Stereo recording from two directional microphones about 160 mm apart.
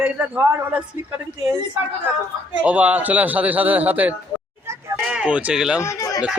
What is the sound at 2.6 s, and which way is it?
Speech, 10° right (ahead or behind).